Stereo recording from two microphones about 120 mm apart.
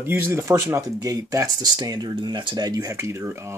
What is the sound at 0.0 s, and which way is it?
Speech, 20° right (ahead or behind).